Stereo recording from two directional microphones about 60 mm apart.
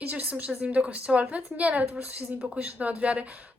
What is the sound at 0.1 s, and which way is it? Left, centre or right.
Speech, right.